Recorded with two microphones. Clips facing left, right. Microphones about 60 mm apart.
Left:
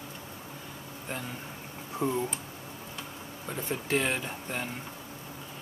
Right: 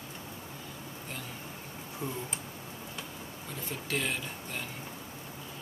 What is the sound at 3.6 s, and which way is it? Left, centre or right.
Speech, left.